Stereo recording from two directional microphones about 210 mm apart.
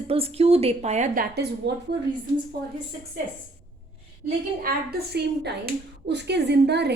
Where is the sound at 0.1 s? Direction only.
25° right (ahead or behind).